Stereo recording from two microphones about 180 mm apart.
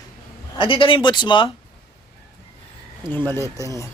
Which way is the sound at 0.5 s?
30° left (ahead or behind).